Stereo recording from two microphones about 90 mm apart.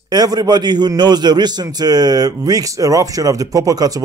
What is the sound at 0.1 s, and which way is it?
A man's voice, 50° right (ahead or behind).